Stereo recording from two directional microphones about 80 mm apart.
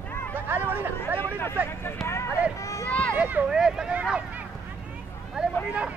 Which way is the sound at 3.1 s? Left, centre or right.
Right.